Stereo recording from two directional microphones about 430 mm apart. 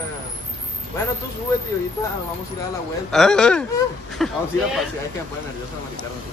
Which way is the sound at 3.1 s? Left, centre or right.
Centre.